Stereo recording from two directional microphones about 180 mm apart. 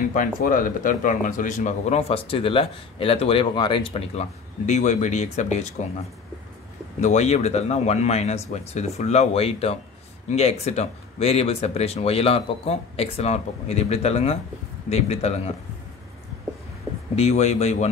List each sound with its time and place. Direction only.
0.1 s a man's voice: 50° left (ahead or behind)
7.0 s a man's voice: 40° left (ahead or behind)
17.1 s a man's voice: 35° left (ahead or behind)